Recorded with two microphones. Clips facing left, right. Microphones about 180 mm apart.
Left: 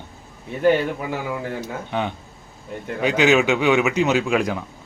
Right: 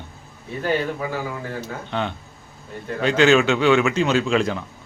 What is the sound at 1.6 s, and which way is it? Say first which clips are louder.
Speech: left 1 dB; 10° left (ahead or behind).